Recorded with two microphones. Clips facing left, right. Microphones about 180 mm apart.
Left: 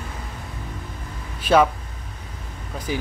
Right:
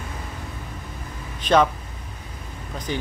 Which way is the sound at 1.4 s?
5° left (ahead or behind).